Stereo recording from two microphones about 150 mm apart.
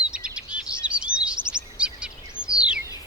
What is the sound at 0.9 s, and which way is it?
Bird vocalization, 5° right (ahead or behind).